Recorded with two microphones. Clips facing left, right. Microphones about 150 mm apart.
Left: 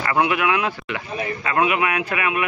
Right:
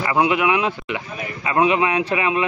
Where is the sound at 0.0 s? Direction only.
20° right (ahead or behind).